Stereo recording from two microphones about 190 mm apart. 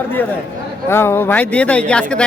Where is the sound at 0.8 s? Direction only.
15° left (ahead or behind).